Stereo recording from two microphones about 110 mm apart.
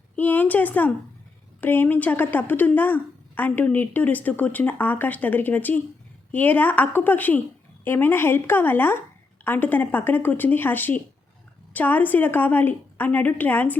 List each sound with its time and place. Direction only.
0.2 s a woman's voice: 15° left (ahead or behind)